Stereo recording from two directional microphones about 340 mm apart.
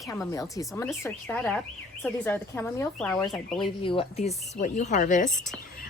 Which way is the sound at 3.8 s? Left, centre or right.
Centre.